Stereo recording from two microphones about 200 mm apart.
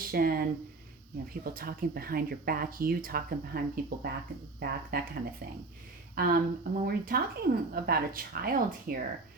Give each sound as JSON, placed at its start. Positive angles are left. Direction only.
{"t": 0.0, "sound": "speech", "side_deg": -45}
{"t": 1.5, "sound": "speech", "side_deg": -50}